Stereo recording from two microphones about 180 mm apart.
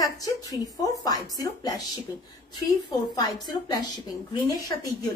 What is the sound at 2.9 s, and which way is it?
A woman's voice, 20° left (ahead or behind).